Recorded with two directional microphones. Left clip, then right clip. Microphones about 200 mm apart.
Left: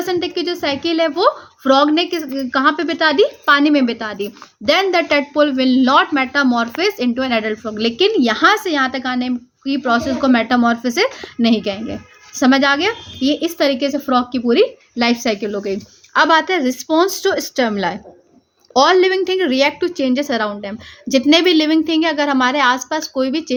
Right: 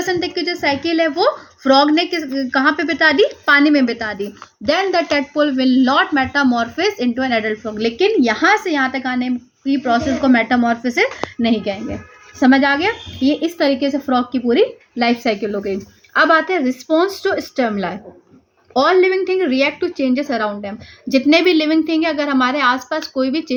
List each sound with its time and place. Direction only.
0.0 s a woman's voice: 35° left (ahead or behind)